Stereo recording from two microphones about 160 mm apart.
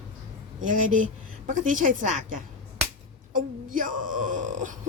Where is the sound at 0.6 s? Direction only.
55° right (ahead or behind).